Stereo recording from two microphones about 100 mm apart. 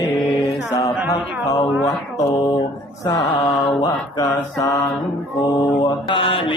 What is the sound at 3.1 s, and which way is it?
Mantra, 50° left (ahead or behind).